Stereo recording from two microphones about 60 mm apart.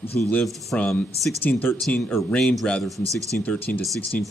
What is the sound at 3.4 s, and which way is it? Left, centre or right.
Speech, left.